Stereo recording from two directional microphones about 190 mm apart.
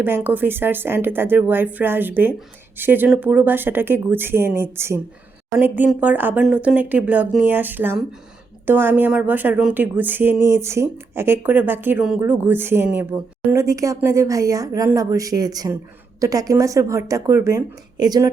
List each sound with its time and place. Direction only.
0.0 s speech: 10° right (ahead or behind)